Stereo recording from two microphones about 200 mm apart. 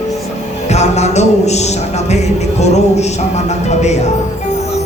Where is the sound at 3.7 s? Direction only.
35° left (ahead or behind).